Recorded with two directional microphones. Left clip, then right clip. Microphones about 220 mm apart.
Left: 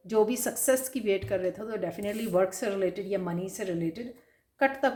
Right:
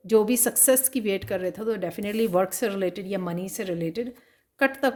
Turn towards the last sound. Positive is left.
turn(degrees=-50)  # may be behind; listen again after turning